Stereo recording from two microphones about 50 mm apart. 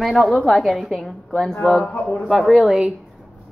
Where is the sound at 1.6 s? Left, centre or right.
Centre.